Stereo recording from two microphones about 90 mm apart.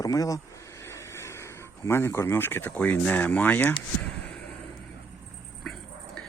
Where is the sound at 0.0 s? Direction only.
40° left (ahead or behind); by 3.8 s 20° left (ahead or behind).